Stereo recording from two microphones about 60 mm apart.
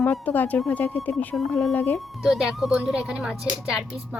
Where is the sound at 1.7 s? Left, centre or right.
Left.